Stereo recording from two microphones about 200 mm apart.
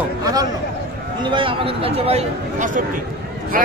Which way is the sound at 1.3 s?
25° right (ahead or behind).